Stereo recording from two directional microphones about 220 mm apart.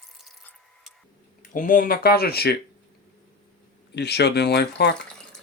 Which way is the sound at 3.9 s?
50° left (ahead or behind).